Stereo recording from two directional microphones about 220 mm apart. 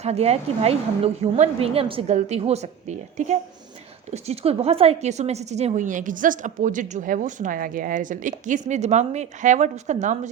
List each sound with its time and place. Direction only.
0.0 s a woman's voice: 30° right (ahead or behind)